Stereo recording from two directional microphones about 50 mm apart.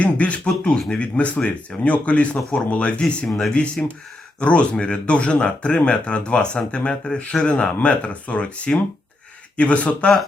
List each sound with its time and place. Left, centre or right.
0.0 s speech: left